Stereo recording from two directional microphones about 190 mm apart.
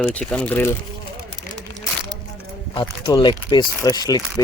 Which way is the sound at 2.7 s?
25° left (ahead or behind).